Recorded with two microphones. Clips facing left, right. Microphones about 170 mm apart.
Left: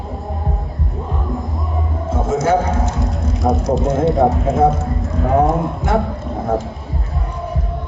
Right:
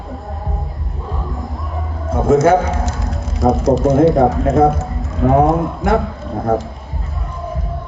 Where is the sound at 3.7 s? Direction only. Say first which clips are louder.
Right 4 dB; 5° right (ahead or behind).